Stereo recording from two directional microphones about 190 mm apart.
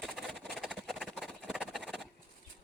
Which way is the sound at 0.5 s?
Centre (ahead or behind).